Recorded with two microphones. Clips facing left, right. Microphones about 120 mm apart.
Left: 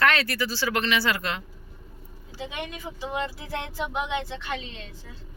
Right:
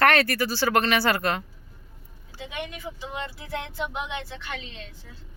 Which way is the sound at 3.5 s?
5° left (ahead or behind).